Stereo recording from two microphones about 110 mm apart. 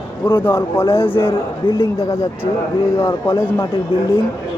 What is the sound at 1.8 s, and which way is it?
A man's voice, 25° left (ahead or behind).